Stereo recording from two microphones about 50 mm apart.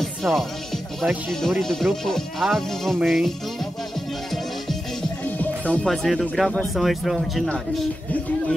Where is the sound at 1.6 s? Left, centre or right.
Centre.